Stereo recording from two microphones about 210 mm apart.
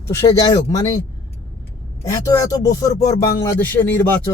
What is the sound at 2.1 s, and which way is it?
Speech, 15° left (ahead or behind).